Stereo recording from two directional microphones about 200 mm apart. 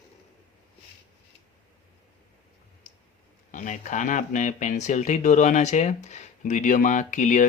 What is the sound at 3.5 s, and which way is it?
Speech, 40° left (ahead or behind).